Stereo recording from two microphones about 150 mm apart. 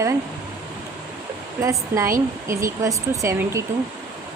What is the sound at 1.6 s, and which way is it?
Speech, 20° right (ahead or behind).